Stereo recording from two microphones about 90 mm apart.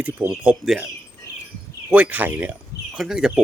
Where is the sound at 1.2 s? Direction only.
35° left (ahead or behind).